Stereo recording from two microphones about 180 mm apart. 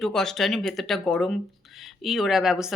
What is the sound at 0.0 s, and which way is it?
Speech, 5° left (ahead or behind).